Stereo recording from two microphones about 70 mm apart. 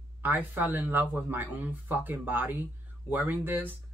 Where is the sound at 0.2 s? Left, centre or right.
Right.